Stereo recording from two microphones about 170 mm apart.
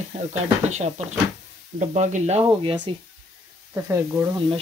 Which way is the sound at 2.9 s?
30° right (ahead or behind).